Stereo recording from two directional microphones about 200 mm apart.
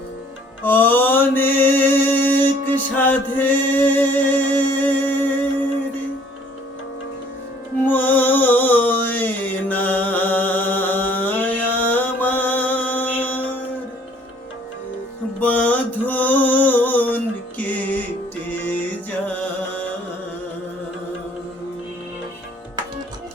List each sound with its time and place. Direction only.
0.6 s mantra: 10° left (ahead or behind)
7.9 s music: 10° left (ahead or behind)
11.9 s mantra: 10° left (ahead or behind)
15.4 s music: 5° left (ahead or behind)